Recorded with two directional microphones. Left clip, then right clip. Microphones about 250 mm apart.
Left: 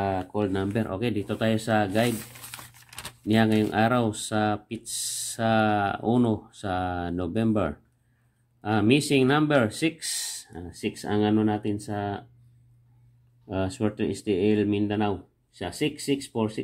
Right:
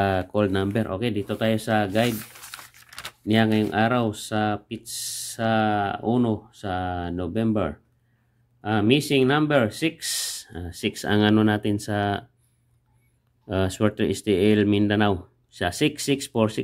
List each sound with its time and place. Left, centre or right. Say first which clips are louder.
0.0 s speech: right 5 dB; right
13.5 s speech: right 5 dB; right